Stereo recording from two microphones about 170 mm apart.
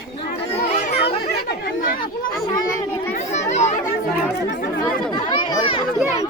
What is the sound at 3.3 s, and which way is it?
Children playing, 45° left (ahead or behind).